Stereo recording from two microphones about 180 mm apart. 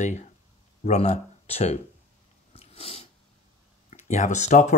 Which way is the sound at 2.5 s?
30° left (ahead or behind).